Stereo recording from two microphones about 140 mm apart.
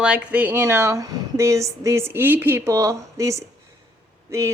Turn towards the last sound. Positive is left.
turn(degrees=-20)  # may be behind; listen again after turning